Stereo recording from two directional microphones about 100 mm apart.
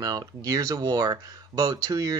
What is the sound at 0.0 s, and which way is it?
Speech, 40° right (ahead or behind).